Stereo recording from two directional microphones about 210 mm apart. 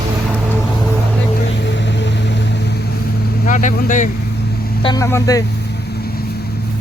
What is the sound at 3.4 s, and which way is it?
Speech, 35° left (ahead or behind).